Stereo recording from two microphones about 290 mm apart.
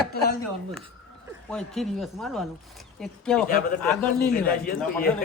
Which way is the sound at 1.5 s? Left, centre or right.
Centre.